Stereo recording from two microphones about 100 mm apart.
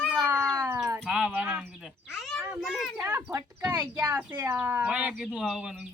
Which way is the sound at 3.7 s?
40° right (ahead or behind).